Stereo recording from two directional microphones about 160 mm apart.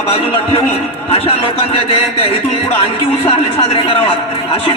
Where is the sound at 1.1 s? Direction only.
35° left (ahead or behind).